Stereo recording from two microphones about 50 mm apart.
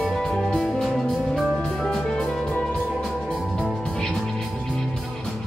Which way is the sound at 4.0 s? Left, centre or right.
Centre.